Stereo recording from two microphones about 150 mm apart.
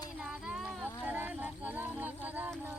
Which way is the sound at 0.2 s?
5° right (ahead or behind).